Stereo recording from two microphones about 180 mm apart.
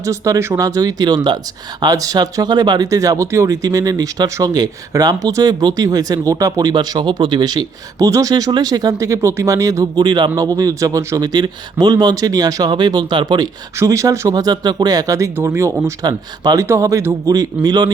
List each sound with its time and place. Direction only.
0.0 s speech: 15° right (ahead or behind)